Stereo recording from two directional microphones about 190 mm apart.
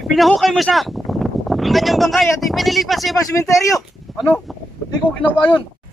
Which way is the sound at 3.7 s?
Centre (ahead or behind).